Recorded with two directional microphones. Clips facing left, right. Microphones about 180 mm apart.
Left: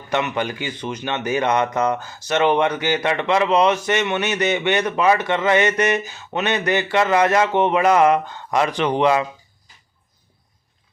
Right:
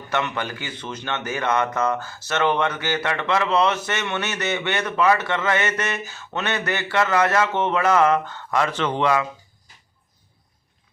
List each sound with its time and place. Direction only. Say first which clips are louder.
0.1 s a man's voice: left 4 dB; 15° left (ahead or behind)